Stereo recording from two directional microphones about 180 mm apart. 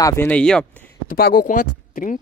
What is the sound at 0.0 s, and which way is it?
Speech, 15° left (ahead or behind).